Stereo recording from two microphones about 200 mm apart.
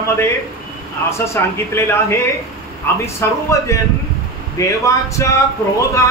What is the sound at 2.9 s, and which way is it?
Speech, 10° left (ahead or behind).